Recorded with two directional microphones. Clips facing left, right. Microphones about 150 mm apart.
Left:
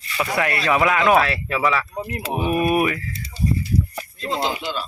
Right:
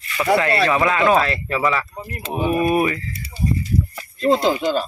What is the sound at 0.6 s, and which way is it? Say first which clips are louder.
Speech: right 1 dB; 10° left (ahead or behind).